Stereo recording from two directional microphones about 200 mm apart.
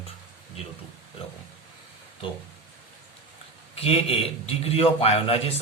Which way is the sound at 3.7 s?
30° left (ahead or behind).